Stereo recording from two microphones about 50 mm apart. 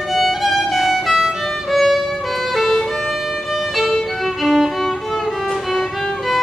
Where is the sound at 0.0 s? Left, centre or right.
Centre.